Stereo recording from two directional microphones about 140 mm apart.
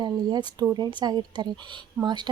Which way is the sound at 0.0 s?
30° right (ahead or behind).